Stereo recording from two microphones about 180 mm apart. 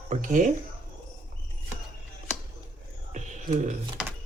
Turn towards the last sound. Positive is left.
turn(degrees=-5)  # may be behind; listen again after turning